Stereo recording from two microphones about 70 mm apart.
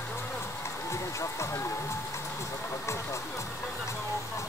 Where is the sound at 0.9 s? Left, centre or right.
Left.